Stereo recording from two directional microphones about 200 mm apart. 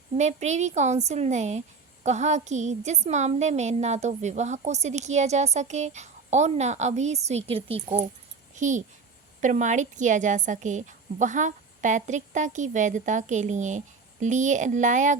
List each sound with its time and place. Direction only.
0.2 s a woman's voice: 35° right (ahead or behind)